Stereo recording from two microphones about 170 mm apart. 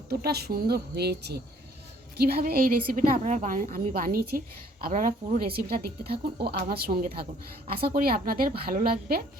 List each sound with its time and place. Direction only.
0.1 s a woman's voice: 70° right (ahead or behind)